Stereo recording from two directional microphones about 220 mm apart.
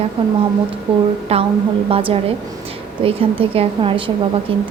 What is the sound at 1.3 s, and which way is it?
A woman's voice, 25° right (ahead or behind).